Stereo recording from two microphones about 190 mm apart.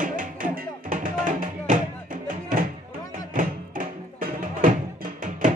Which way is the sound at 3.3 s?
45° right (ahead or behind).